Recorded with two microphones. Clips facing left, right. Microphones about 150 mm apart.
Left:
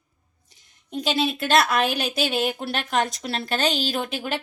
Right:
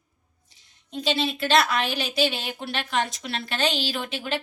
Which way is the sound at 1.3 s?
50° left (ahead or behind).